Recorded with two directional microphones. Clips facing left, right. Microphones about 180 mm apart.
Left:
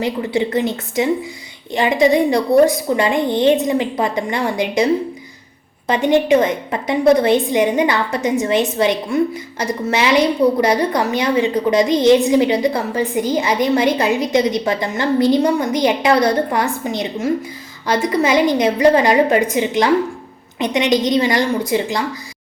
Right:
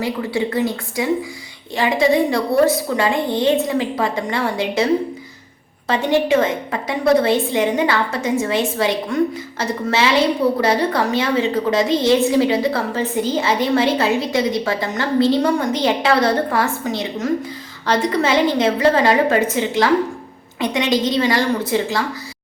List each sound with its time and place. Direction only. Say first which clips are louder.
0.0 s a woman's voice: left 2 dB; 20° left (ahead or behind)
5.9 s a woman's voice: left 3 dB; 20° left (ahead or behind)